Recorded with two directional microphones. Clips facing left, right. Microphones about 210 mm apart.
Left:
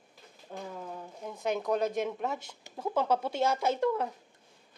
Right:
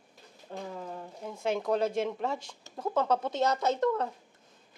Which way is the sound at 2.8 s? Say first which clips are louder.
Right 1 dB; 5° left (ahead or behind).